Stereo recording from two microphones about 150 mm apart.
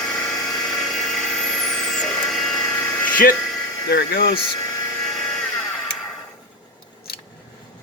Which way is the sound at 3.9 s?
90° left.